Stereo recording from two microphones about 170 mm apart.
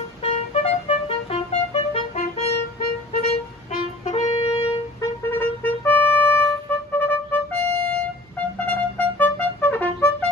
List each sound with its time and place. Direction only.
0.2 s music: 40° left (ahead or behind)
4.0 s music: 40° left (ahead or behind)
5.0 s music: 15° left (ahead or behind)